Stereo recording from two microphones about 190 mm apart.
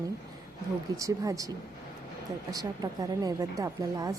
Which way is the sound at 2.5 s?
20° right (ahead or behind).